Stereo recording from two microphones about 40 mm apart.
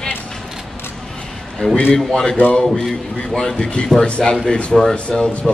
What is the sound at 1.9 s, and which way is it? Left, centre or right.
Speech, centre.